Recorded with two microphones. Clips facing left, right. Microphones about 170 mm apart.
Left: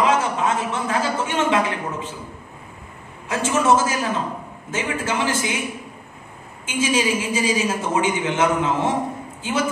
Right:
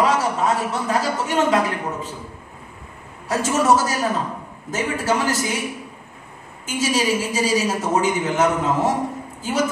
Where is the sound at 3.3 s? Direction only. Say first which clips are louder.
Right 1 dB; 40° right (ahead or behind).